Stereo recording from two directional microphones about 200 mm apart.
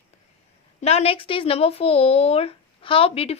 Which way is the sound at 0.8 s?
30° left (ahead or behind).